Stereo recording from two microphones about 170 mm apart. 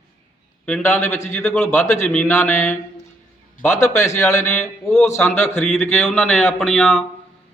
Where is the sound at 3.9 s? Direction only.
15° left (ahead or behind).